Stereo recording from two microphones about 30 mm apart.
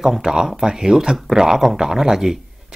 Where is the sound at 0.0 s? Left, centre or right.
Centre.